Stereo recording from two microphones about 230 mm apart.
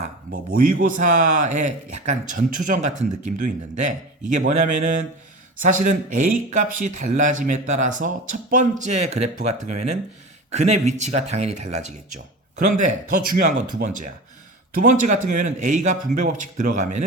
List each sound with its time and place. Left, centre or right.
0.0 s speech: right